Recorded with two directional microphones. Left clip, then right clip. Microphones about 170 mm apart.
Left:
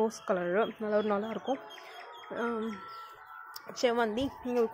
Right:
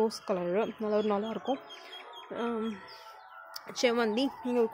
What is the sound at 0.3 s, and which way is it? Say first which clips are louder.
Speech: left 1 dB; 20° right (ahead or behind).